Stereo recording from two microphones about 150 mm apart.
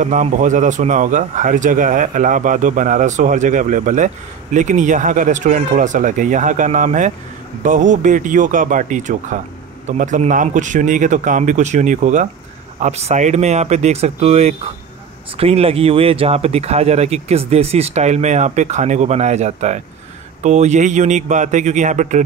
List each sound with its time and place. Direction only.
0.0 s a man's voice: 55° right (ahead or behind)